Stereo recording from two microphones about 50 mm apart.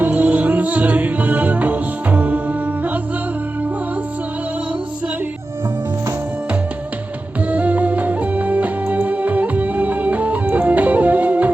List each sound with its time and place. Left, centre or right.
0.0 s music: right
7.5 s music: right